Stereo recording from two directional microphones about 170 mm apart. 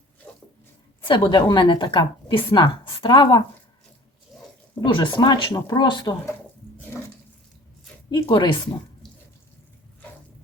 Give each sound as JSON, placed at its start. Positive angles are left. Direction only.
{"t": 0.2, "sound": "sink", "side_deg": 0}
{"t": 1.0, "sound": "speech", "side_deg": 30}
{"t": 4.3, "sound": "a sound", "side_deg": 0}
{"t": 4.8, "sound": "speech", "side_deg": 30}
{"t": 8.1, "sound": "speech", "side_deg": 25}